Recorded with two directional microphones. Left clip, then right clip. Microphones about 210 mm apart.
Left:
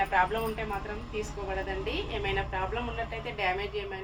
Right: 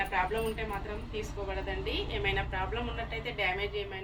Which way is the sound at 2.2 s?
5° left (ahead or behind).